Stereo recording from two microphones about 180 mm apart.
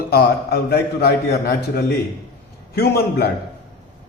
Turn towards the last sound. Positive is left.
turn(degrees=65)  # may be behind; listen again after turning